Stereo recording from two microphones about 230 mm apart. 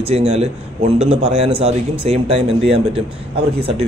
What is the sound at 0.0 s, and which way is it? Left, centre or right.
Speech, right.